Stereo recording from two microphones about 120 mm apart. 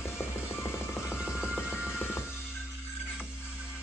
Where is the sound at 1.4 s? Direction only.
20° left (ahead or behind).